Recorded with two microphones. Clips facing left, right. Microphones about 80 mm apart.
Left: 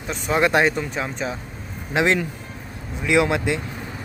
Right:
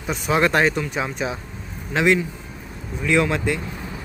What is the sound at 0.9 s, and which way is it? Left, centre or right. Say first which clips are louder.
Speech: right 1 dB; centre.